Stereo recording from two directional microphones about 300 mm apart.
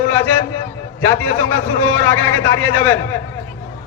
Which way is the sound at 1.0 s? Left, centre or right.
Centre.